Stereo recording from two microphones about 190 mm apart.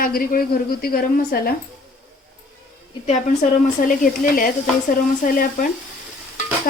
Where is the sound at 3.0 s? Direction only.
40° left (ahead or behind).